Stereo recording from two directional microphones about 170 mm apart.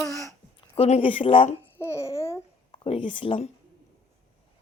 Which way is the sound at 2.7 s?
30° left (ahead or behind).